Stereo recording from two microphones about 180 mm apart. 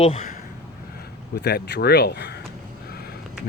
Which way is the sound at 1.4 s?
60° left (ahead or behind).